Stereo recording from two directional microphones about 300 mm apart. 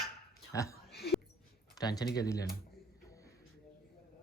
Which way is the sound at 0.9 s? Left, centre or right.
Left.